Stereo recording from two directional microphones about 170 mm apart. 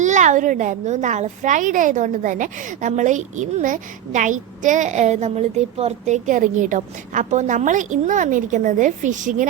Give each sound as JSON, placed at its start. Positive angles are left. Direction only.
{"t": 0.0, "sound": "a woman's voice", "side_deg": -45}